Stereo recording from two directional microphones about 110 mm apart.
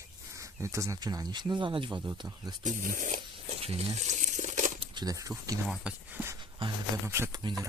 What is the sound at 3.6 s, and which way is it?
Crumpling, 70° right (ahead or behind).